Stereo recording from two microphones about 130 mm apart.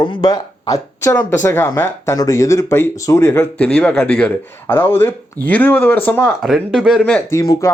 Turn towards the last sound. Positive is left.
turn(degrees=25)  # may be behind; listen again after turning